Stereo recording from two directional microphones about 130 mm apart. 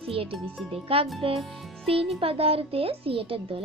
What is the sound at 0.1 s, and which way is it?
Speech, 45° right (ahead or behind).